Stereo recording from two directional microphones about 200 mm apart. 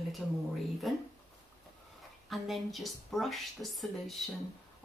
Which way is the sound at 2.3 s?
Centre (ahead or behind).